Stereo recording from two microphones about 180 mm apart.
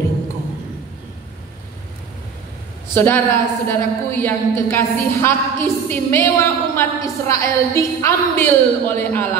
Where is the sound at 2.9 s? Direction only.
10° left (ahead or behind).